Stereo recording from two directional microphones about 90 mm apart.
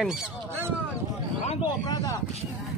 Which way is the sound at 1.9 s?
40° left (ahead or behind).